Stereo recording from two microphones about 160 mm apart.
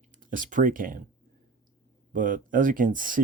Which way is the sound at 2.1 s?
55° right (ahead or behind).